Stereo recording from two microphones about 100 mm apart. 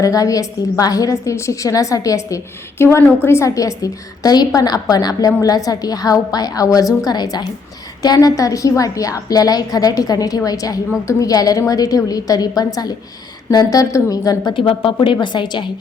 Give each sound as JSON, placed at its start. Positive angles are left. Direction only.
{"t": 0.0, "sound": "a woman's voice", "side_deg": 35}
{"t": 14.5, "sound": "a woman's voice", "side_deg": 60}